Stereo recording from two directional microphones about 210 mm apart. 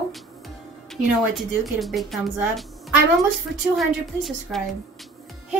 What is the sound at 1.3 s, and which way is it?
A woman's voice, centre (ahead or behind).